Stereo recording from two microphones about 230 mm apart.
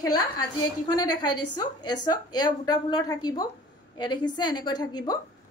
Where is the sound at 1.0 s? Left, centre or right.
Left.